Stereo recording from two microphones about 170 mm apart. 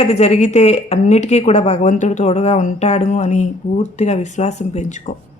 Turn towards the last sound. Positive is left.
turn(degrees=45)  # may be behind; listen again after turning